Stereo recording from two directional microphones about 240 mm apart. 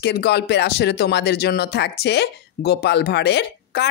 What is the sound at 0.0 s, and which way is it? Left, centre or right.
Speech, left.